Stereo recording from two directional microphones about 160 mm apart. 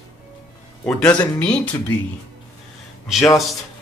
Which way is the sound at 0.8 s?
5° left (ahead or behind).